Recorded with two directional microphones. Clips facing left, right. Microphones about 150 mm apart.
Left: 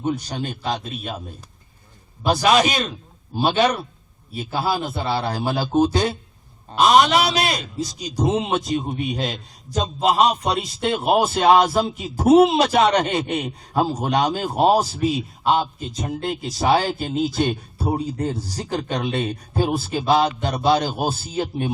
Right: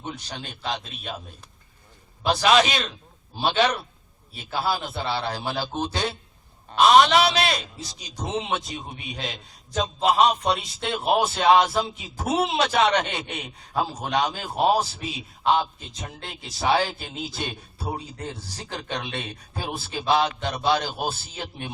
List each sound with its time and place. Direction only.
0.0 s a man's voice: 40° left (ahead or behind)
2.2 s a man's voice: 45° left (ahead or behind)
6.9 s a man's voice: 10° left (ahead or behind)
7.3 s a man's voice: 45° left (ahead or behind)